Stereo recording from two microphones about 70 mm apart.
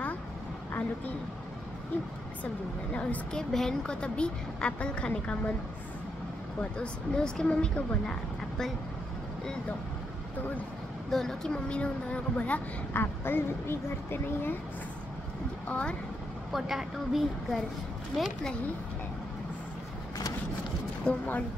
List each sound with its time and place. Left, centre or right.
2.9 s a woman's voice: centre
6.6 s a woman's voice: centre
11.1 s a woman's voice: centre; by 13.0 s left
13.0 s speech: left
15.7 s a woman's voice: centre
16.5 s a woman's voice: centre
21.0 s speech: left